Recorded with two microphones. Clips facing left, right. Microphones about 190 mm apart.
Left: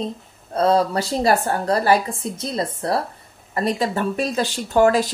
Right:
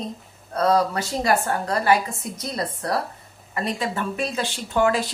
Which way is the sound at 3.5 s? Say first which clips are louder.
Left 5 dB; 35° left (ahead or behind).